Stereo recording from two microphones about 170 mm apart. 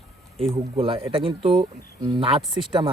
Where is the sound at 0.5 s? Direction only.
35° right (ahead or behind).